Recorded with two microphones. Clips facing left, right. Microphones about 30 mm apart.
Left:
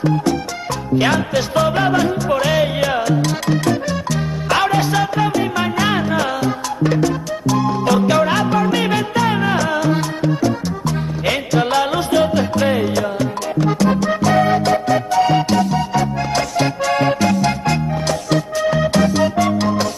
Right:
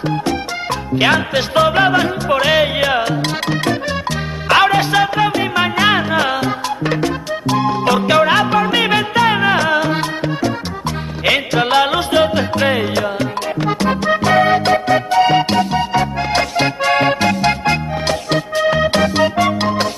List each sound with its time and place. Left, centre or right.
0.0 s music: right
5.8 s salsa music: right
9.1 s music: right